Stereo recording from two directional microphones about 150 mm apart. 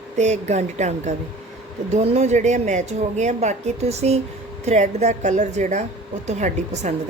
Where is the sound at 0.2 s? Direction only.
50° right (ahead or behind).